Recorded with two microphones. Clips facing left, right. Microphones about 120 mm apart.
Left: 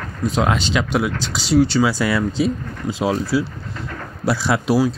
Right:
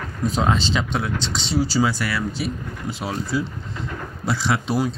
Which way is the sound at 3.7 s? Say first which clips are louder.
Even; 15° right (ahead or behind).